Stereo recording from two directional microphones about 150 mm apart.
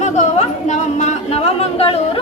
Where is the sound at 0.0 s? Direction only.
50° left (ahead or behind).